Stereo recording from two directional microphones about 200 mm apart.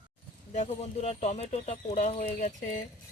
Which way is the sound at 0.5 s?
35° left (ahead or behind).